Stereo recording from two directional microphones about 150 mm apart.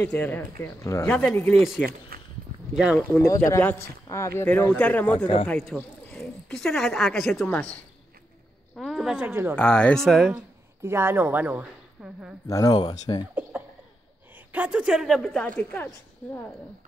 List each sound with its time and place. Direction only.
0.1 s speech: 10° left (ahead or behind)
1.0 s a woman's voice: 5° left (ahead or behind)
1.9 s speech: 90° right
2.7 s speech: 5° right (ahead or behind)
3.0 s speech: 20° left (ahead or behind)
8.7 s a woman's voice: centre (ahead or behind)
9.2 s speech: 15° right (ahead or behind)
9.6 s a woman's voice: 5° left (ahead or behind)
10.8 s speech: 15° right (ahead or behind)
12.4 s speech: 25° left (ahead or behind)
13.3 s a woman's voice: 10° right (ahead or behind); by 15.9 s 10° left (ahead or behind)